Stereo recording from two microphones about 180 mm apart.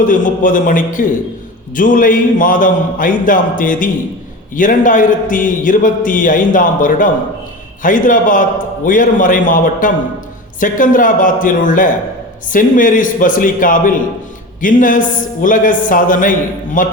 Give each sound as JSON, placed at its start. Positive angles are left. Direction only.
{"t": 0.0, "sound": "a man's voice", "side_deg": 50}